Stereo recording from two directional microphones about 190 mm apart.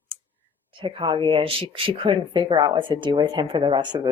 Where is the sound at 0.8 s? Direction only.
25° right (ahead or behind).